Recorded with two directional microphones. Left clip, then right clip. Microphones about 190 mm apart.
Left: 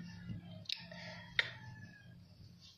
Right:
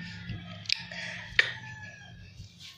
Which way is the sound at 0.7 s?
15° left (ahead or behind).